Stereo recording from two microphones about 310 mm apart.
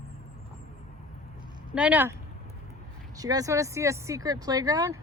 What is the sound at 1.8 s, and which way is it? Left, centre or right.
Speech, centre.